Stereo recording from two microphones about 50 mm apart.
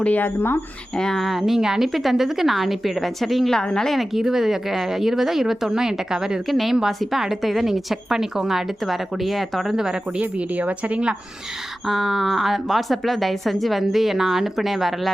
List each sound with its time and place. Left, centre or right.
0.2 s speech: left
0.9 s speech: centre
1.2 s speech: centre
4.1 s speech: centre
6.5 s speech: centre
9.7 s speech: centre
10.2 s speech: right
11.9 s speech: centre